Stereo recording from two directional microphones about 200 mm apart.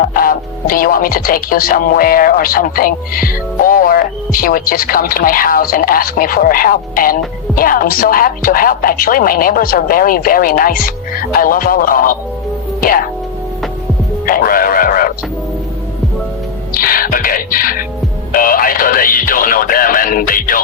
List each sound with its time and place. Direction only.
0.0 s speech: 45° left (ahead or behind)
14.3 s music: 45° left (ahead or behind)
16.7 s music: 45° left (ahead or behind)
18.3 s speech: 45° left (ahead or behind)